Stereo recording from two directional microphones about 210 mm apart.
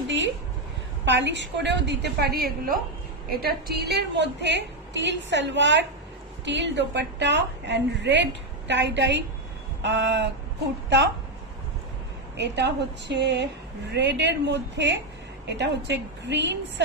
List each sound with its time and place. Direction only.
1.0 s a woman's voice: 55° right (ahead or behind)
12.4 s a woman's voice: 55° right (ahead or behind)